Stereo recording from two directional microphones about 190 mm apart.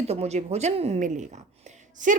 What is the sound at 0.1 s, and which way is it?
A woman's voice, 35° right (ahead or behind).